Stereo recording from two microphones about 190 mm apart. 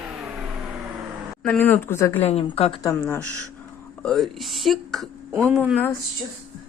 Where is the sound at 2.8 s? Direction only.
10° left (ahead or behind).